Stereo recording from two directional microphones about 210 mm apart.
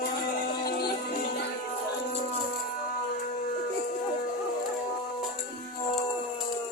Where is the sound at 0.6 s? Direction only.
45° left (ahead or behind).